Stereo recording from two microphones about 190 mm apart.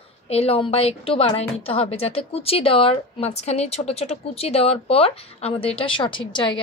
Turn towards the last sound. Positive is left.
turn(degrees=25)  # may be behind; listen again after turning